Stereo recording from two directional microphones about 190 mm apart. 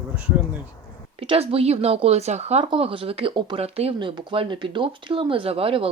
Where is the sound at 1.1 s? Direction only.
30° right (ahead or behind).